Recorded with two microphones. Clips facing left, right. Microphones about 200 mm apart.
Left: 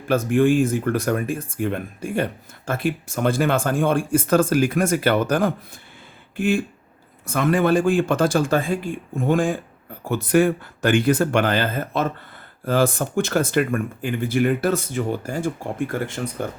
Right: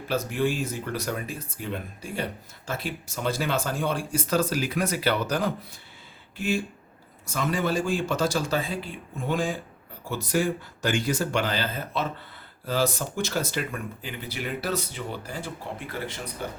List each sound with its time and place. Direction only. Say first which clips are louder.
0.1 s speech: left 9 dB; 50° left (ahead or behind)
6.3 s a sound: left 6 dB; 55° left (ahead or behind)
7.3 s speech: left 8 dB; 55° left (ahead or behind)